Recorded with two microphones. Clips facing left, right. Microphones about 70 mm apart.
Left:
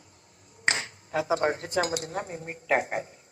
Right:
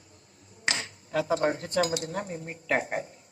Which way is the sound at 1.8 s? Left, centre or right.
Left.